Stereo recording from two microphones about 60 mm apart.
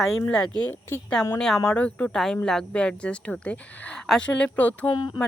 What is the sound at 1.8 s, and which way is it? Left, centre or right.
Speech, left.